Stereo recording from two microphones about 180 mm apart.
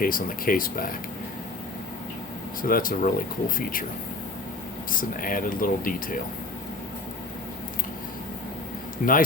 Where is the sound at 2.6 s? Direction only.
50° left (ahead or behind).